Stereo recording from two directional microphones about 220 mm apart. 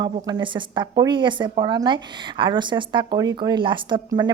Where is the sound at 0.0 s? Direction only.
20° right (ahead or behind).